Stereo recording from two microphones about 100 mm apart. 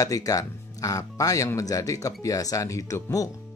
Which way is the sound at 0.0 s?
35° left (ahead or behind).